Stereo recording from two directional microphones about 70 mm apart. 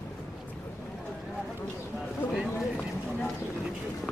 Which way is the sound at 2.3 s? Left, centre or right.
Centre.